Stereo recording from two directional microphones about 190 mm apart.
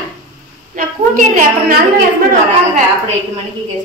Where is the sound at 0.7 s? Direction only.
45° right (ahead or behind).